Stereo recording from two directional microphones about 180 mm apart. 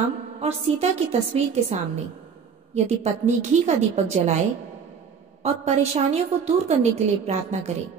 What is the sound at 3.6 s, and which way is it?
Speech, 40° right (ahead or behind).